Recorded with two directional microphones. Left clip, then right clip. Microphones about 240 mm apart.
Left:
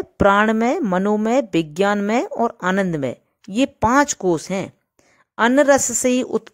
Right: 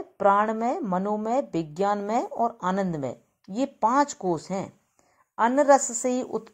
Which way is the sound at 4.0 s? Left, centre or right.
Left.